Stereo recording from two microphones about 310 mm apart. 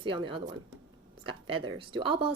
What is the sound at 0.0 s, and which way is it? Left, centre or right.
Speech, centre.